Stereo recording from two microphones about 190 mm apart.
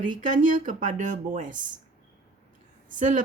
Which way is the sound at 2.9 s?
45° right (ahead or behind).